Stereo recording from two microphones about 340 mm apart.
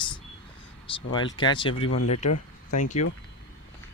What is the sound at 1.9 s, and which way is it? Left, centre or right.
Speech, left.